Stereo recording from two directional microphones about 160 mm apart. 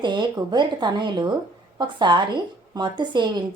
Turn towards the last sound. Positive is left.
turn(degrees=-30)  # may be behind; listen again after turning